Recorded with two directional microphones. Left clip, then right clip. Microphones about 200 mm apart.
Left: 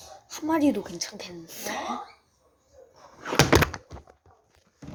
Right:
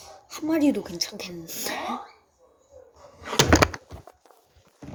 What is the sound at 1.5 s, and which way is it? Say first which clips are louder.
Speech: right 2 dB; 20° right (ahead or behind).